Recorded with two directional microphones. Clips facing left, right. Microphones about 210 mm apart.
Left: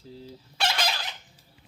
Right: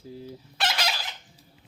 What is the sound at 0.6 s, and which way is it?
Chicken, centre (ahead or behind).